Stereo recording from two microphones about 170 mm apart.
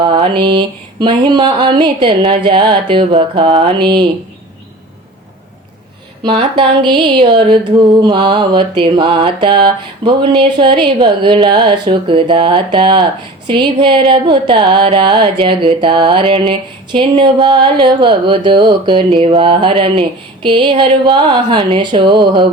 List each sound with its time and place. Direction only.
0.0 s mantra: 30° right (ahead or behind)
6.2 s mantra: 30° right (ahead or behind)